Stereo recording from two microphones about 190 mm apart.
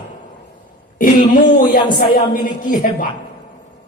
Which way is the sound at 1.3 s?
45° left (ahead or behind).